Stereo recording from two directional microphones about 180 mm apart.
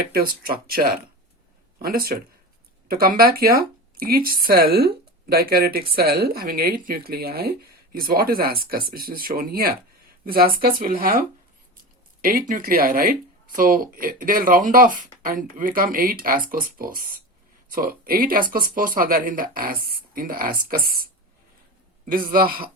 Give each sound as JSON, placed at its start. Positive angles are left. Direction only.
{"t": 0.1, "sound": "speech", "side_deg": -55}
{"t": 12.2, "sound": "speech", "side_deg": -50}